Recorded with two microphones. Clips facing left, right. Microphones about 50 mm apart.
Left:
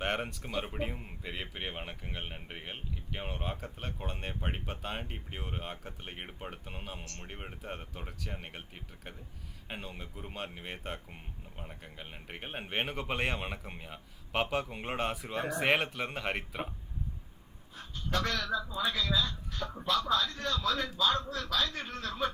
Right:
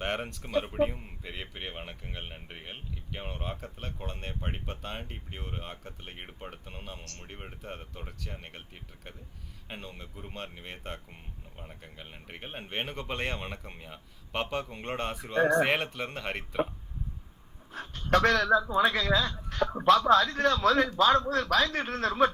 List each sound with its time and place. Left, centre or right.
0.0 s speech: centre
17.7 s speech: right